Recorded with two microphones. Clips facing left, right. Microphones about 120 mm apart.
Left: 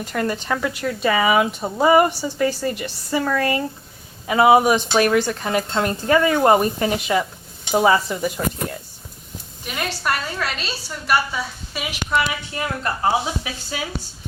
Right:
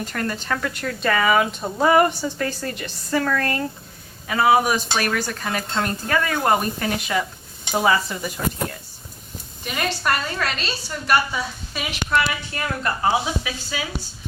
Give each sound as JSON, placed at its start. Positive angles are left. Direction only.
{"t": 0.1, "sound": "speech", "side_deg": 15}
{"t": 9.6, "sound": "a woman's voice", "side_deg": 0}
{"t": 12.5, "sound": "speech", "side_deg": 25}